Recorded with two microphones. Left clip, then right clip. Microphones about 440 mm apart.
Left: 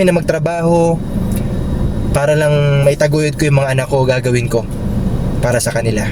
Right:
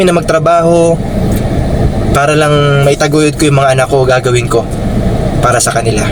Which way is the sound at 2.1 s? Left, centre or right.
Left.